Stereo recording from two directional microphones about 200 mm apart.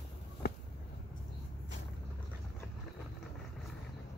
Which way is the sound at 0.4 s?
50° left (ahead or behind).